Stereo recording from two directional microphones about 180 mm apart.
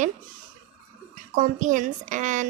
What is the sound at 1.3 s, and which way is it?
A woman's voice, 45° right (ahead or behind).